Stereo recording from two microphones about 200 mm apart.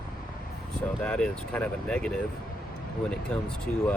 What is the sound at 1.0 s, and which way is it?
Speech, 5° left (ahead or behind).